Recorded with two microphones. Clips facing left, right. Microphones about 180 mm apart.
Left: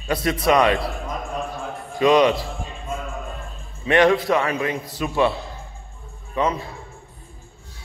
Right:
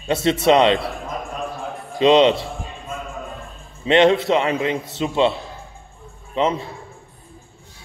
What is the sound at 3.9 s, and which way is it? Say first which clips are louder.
A man's voice: right 2 dB; 25° right (ahead or behind).